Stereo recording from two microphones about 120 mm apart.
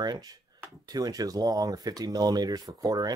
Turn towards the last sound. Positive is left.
turn(degrees=-30)  # may be behind; listen again after turning